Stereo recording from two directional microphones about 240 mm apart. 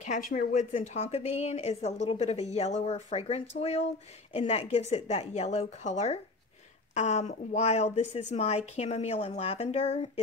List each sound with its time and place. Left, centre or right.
0.3 s a woman's voice: left